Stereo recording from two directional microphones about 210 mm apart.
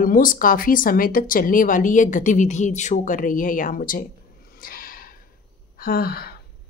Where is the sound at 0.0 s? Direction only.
40° left (ahead or behind).